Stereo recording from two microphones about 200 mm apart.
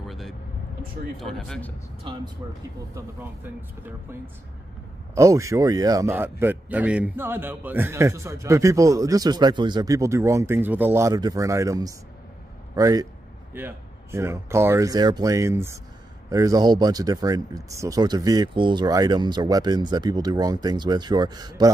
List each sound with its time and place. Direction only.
1.1 s speech: centre (ahead or behind)
2.1 s speech: 25° right (ahead or behind)
2.9 s a man's voice: 15° right (ahead or behind)